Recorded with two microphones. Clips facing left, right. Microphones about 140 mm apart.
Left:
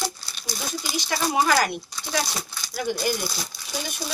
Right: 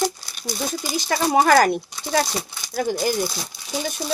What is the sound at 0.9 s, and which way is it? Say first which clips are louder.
Speech: right 5 dB; 50° right (ahead or behind).